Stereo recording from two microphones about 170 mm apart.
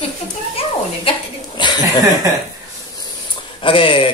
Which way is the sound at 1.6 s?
25° left (ahead or behind).